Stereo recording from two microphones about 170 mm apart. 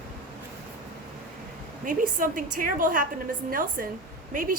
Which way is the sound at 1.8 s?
50° right (ahead or behind).